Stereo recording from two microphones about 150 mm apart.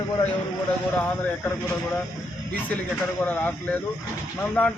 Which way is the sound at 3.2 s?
10° left (ahead or behind).